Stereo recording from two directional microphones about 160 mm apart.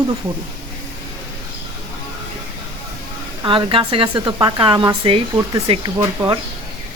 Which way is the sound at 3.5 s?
35° right (ahead or behind).